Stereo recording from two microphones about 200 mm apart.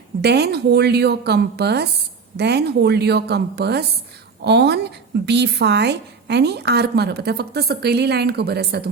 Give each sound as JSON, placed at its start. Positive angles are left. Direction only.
{"t": 0.2, "sound": "speech", "side_deg": -55}